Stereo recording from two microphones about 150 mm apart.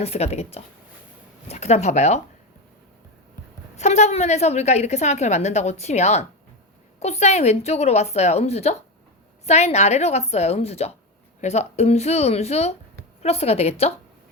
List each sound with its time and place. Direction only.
0.0 s a woman's voice: 45° left (ahead or behind)
3.8 s a woman's voice: 50° left (ahead or behind)